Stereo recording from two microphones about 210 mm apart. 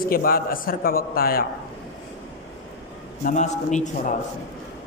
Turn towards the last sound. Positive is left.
turn(degrees=35)  # may be behind; listen again after turning